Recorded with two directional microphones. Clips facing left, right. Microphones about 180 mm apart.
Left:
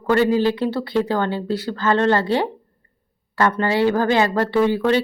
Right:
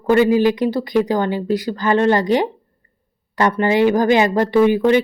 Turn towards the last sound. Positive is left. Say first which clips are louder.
# right 4 dB
turn(degrees=-15)  # may be behind; listen again after turning